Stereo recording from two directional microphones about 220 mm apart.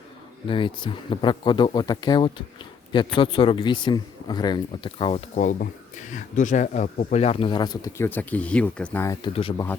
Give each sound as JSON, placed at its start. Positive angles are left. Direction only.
{"t": 0.4, "sound": "speech", "side_deg": 25}
{"t": 9.2, "sound": "speech", "side_deg": 25}